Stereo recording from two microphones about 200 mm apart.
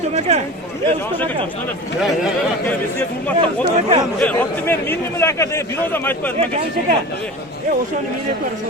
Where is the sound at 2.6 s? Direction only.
10° left (ahead or behind).